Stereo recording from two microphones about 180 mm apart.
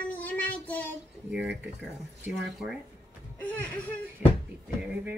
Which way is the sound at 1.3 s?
5° right (ahead or behind).